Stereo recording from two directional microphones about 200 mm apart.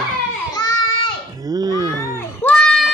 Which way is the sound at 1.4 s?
20° right (ahead or behind).